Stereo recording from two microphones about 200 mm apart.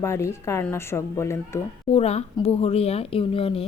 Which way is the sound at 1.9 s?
30° left (ahead or behind).